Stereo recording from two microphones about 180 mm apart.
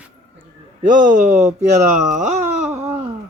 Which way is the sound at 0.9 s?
45° right (ahead or behind).